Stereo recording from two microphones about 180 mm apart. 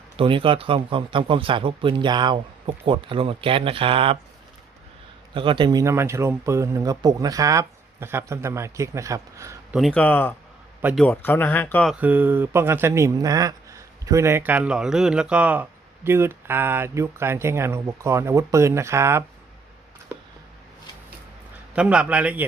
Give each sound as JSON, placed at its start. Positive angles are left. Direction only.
{"t": 0.2, "sound": "speech", "side_deg": -30}
{"t": 5.3, "sound": "speech", "side_deg": -25}
{"t": 9.7, "sound": "speech", "side_deg": 5}
{"t": 11.9, "sound": "speech", "side_deg": -10}
{"t": 21.8, "sound": "speech", "side_deg": -5}